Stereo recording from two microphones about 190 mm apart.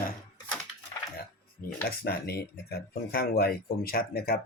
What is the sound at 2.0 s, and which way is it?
Speech, 55° left (ahead or behind).